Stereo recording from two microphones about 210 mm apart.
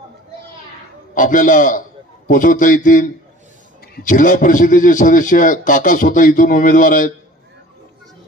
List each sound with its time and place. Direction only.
1.1 s a man's voice: 40° left (ahead or behind)